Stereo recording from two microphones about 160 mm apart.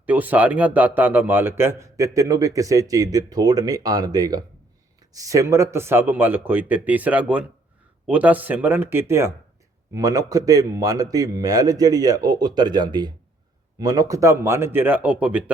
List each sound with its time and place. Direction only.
0.0 s speech: 10° right (ahead or behind)